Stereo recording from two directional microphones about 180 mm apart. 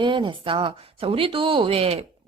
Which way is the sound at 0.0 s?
25° right (ahead or behind).